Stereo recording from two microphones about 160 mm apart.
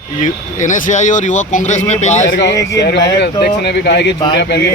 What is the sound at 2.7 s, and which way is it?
Speech, 90° left.